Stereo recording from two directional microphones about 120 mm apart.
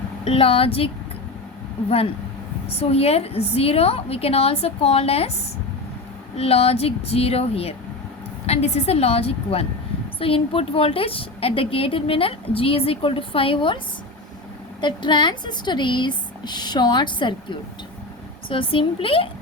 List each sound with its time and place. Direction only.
0.3 s a woman's voice: 50° left (ahead or behind)
2.6 s a woman's voice: 55° left (ahead or behind)
6.3 s a woman's voice: 55° left (ahead or behind)
14.8 s a woman's voice: 40° left (ahead or behind)